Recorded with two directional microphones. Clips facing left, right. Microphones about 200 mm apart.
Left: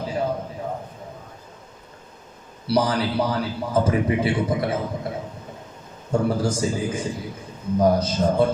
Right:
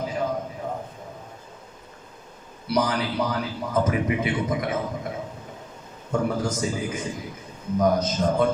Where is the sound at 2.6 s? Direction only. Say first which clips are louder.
Left 3 dB; 30° left (ahead or behind).